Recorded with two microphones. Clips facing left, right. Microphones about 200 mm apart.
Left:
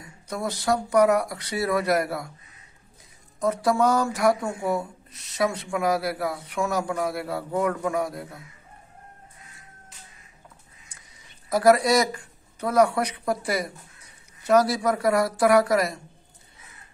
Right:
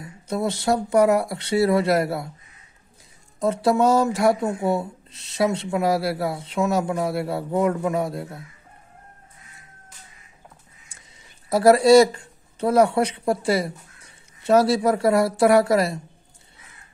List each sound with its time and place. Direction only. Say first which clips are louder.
0.3 s speech: right 3 dB; 25° right (ahead or behind)
3.3 s speech: right 3 dB; 25° right (ahead or behind)
11.0 s speech: right 1 dB; 30° right (ahead or behind)